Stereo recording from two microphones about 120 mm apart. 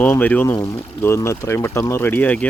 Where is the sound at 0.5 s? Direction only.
25° left (ahead or behind).